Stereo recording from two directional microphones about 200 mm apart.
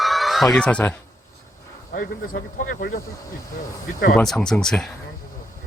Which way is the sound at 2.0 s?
45° left (ahead or behind).